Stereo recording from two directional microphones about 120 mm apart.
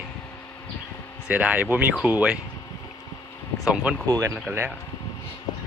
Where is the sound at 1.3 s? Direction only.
10° right (ahead or behind).